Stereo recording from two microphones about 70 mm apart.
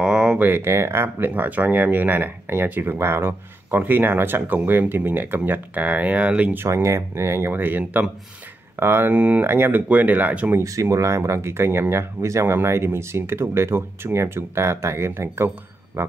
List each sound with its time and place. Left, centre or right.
0.0 s a sound: centre
0.4 s speech: right
6.7 s speech: right
7.5 s speech: right
10.6 s speech: right